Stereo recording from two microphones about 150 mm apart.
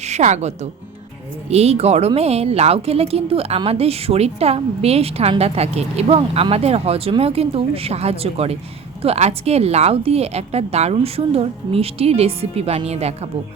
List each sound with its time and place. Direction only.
0.0 s a woman's voice: 50° right (ahead or behind)